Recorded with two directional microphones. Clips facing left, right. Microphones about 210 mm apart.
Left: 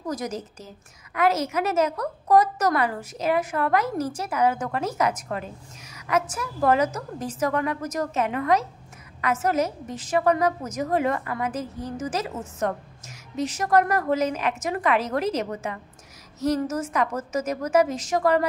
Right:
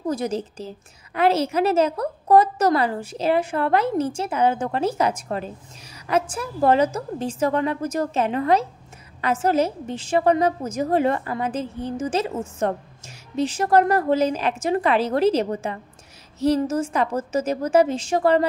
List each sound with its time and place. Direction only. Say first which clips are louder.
0.0 s a woman's voice: right 5 dB; 30° right (ahead or behind)